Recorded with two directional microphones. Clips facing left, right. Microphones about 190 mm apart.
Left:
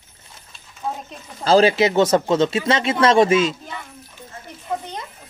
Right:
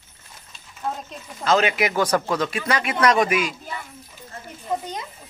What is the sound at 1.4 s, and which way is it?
Speech, 30° left (ahead or behind).